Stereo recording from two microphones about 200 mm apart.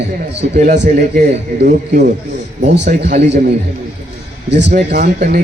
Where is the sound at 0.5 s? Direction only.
40° right (ahead or behind).